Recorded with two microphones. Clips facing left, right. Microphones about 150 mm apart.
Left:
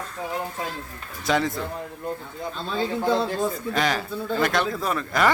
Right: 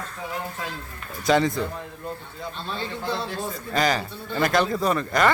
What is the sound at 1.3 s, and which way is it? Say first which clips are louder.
Speech: right 3 dB; centre (ahead or behind).